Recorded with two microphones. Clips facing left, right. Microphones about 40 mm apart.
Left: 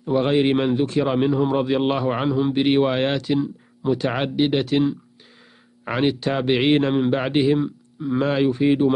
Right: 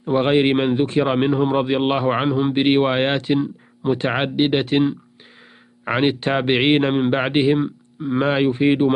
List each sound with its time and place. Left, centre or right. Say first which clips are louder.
0.0 s a man's voice: right 2 dB; right